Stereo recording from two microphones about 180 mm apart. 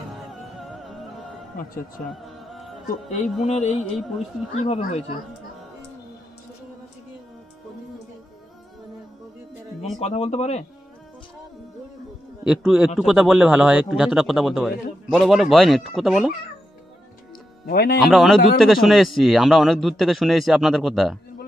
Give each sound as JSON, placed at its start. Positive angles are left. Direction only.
{"t": 0.6, "sound": "music", "side_deg": 0}
{"t": 2.9, "sound": "music", "side_deg": 40}
{"t": 9.9, "sound": "music", "side_deg": 35}
{"t": 12.4, "sound": "a man's voice", "side_deg": 0}
{"t": 17.6, "sound": "speech", "side_deg": 60}
{"t": 18.0, "sound": "a man's voice", "side_deg": 0}